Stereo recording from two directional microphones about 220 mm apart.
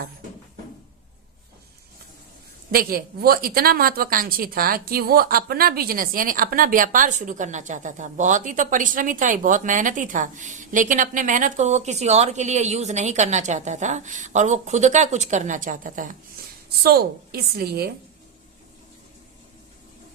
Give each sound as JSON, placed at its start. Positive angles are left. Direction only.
{"t": 2.7, "sound": "a woman's voice", "side_deg": -45}